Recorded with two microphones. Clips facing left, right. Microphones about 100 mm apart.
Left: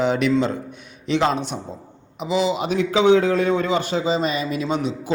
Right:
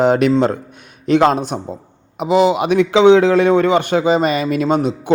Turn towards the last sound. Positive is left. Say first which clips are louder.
# right 7 dB
turn(degrees=-50)  # may be behind; listen again after turning